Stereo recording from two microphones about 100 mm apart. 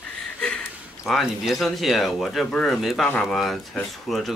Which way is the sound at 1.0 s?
Centre (ahead or behind).